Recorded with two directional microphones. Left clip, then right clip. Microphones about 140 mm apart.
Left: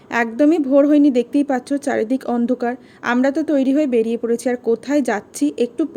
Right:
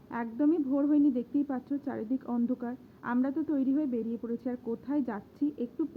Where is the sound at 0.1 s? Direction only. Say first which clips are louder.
Left 14 dB; 25° left (ahead or behind).